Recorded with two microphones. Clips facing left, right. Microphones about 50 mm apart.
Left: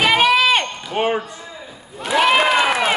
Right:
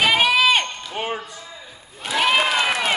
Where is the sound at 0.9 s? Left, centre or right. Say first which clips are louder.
Left 8 dB; left.